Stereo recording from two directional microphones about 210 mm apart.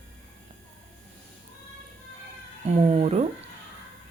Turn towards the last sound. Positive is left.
turn(degrees=-30)  # may be behind; listen again after turning